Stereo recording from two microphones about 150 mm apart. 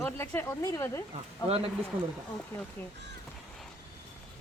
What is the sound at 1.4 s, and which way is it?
Speech, 40° right (ahead or behind).